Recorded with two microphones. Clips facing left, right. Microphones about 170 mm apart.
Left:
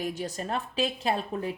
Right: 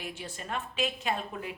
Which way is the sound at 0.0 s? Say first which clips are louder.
Left 8 dB; 40° left (ahead or behind).